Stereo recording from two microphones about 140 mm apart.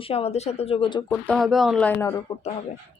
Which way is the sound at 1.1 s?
5° left (ahead or behind).